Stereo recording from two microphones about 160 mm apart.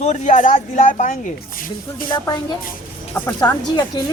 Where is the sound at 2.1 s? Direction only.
25° left (ahead or behind).